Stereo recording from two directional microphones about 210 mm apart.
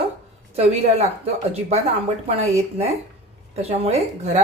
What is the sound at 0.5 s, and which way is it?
Speech, 30° right (ahead or behind).